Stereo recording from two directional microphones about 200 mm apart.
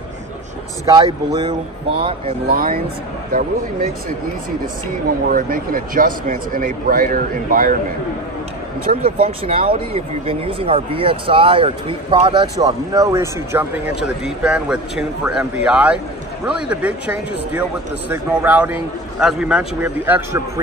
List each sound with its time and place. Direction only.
0.8 s speech: 20° right (ahead or behind)
2.4 s speech: 45° right (ahead or behind)
5.3 s speech: 45° right (ahead or behind)
8.9 s speech: 40° right (ahead or behind)
9.5 s a man's voice: 25° right (ahead or behind)